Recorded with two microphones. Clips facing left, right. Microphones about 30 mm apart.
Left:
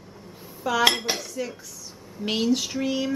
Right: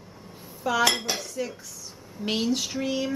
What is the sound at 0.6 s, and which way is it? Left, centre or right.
Dishes, centre.